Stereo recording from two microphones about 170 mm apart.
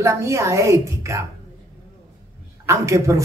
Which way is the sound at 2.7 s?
20° right (ahead or behind).